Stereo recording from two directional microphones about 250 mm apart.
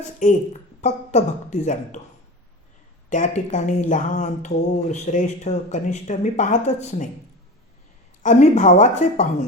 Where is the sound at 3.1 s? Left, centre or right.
Left.